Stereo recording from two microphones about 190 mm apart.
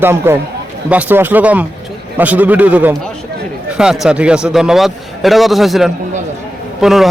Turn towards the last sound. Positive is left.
turn(degrees=0)  # may be behind; listen again after turning